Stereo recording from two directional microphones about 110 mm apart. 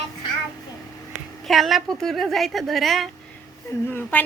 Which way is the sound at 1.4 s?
Centre (ahead or behind).